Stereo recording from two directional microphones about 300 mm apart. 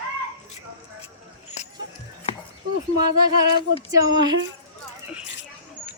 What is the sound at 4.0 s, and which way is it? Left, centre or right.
Speech, centre.